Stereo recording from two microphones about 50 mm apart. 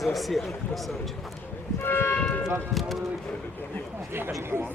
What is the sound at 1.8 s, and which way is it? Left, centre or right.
Church bell, left.